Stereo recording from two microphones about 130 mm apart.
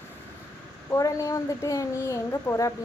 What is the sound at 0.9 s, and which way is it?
Speech, 25° left (ahead or behind).